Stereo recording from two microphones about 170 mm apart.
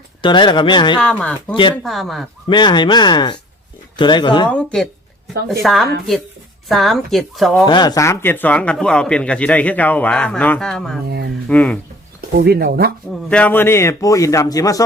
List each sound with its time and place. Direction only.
0.2 s a man's voice: 25° left (ahead or behind)
0.9 s a man's voice: 5° left (ahead or behind)
2.5 s a man's voice: 25° left (ahead or behind)
4.5 s speech: 5° left (ahead or behind)
7.6 s a man's voice: 25° left (ahead or behind); by 11.8 s 5° left (ahead or behind)
12.4 s speech: 65° right (ahead or behind)
13.3 s a man's voice: 10° left (ahead or behind)